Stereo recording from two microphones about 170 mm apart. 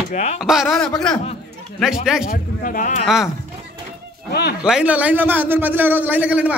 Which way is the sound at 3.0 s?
5° right (ahead or behind).